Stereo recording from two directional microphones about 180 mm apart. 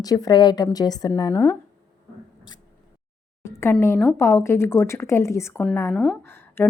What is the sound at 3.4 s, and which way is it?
A woman's voice, 15° left (ahead or behind).